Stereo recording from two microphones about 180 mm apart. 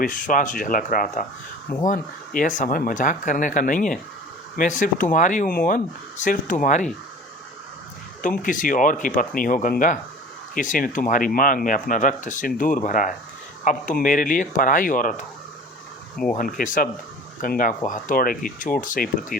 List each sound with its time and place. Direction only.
0.0 s speech: 50° left (ahead or behind)
8.2 s speech: 50° left (ahead or behind)
16.3 s speech: 50° left (ahead or behind)